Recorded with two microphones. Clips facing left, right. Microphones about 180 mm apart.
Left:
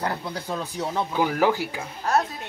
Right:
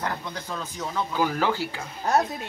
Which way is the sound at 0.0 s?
30° left (ahead or behind).